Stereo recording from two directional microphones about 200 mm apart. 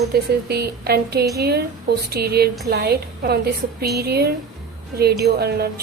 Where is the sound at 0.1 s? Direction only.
55° right (ahead or behind).